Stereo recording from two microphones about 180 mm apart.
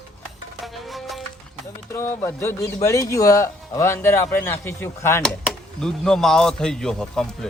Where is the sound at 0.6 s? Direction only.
Centre (ahead or behind).